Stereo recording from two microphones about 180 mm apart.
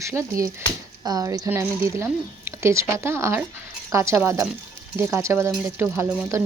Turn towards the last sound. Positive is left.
turn(degrees=-15)  # may be behind; listen again after turning